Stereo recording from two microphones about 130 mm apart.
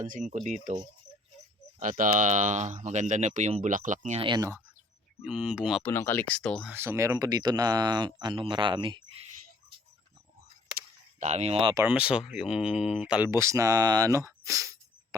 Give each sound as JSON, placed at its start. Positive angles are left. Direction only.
{"t": 0.0, "sound": "speech", "side_deg": -80}
{"t": 1.8, "sound": "speech", "side_deg": -90}
{"t": 5.2, "sound": "speech", "side_deg": -10}
{"t": 5.8, "sound": "speech", "side_deg": 15}
{"t": 6.7, "sound": "speech", "side_deg": -20}
{"t": 11.2, "sound": "speech", "side_deg": -60}
{"t": 11.8, "sound": "speech", "side_deg": -10}
{"t": 13.3, "sound": "speech", "side_deg": -20}